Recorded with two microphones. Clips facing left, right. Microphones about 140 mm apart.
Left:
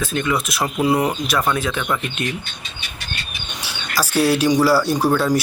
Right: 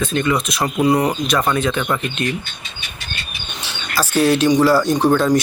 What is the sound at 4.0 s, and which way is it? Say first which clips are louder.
Speech: right 2 dB; 10° left (ahead or behind).